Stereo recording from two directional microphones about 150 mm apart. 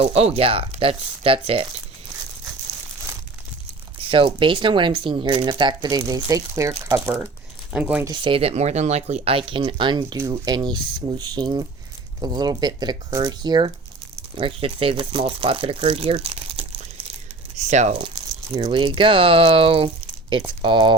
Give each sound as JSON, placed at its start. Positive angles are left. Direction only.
{"t": 0.0, "sound": "speech", "side_deg": -40}
{"t": 4.0, "sound": "speech", "side_deg": -35}
{"t": 7.7, "sound": "speech", "side_deg": -10}
{"t": 8.0, "sound": "speech", "side_deg": -30}
{"t": 14.3, "sound": "speech", "side_deg": -35}
{"t": 17.6, "sound": "speech", "side_deg": -50}
{"t": 17.9, "sound": "speech", "side_deg": -30}